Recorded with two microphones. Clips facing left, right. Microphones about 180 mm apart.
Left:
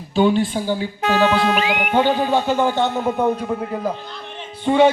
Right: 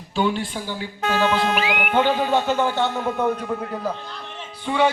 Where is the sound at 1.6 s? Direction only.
45° left (ahead or behind).